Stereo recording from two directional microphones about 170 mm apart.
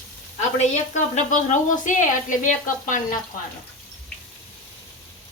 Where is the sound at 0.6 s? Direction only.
45° left (ahead or behind).